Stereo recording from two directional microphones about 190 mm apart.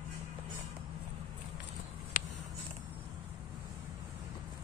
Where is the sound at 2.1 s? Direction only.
40° left (ahead or behind).